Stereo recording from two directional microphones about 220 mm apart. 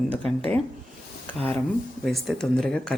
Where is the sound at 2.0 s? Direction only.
Centre (ahead or behind).